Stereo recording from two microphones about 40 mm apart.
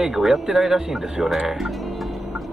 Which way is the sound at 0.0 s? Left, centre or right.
Centre.